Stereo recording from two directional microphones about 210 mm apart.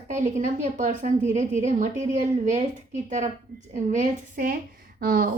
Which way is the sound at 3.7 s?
35° right (ahead or behind).